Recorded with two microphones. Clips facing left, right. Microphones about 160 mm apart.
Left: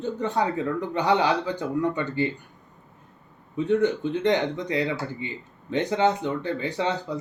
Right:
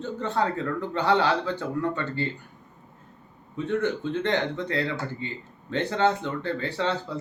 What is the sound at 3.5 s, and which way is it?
Speech, 15° left (ahead or behind).